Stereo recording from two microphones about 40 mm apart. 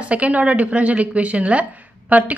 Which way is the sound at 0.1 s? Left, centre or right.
Right.